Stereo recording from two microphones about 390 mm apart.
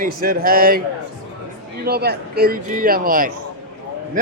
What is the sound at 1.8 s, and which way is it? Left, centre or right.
A man's voice, right.